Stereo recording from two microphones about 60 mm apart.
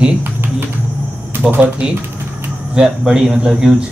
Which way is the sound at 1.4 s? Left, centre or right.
Centre.